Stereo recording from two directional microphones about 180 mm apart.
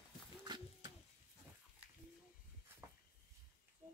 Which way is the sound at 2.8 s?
15° right (ahead or behind).